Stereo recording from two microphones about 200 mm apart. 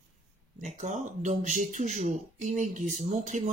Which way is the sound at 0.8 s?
40° right (ahead or behind).